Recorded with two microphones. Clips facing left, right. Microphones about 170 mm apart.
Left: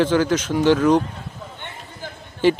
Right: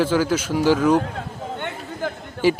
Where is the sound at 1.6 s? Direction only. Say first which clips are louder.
Right 10 dB; 65° right (ahead or behind).